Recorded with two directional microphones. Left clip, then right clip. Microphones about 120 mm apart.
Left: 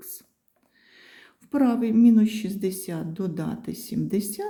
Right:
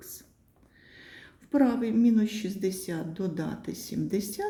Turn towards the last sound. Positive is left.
turn(degrees=40)  # may be behind; listen again after turning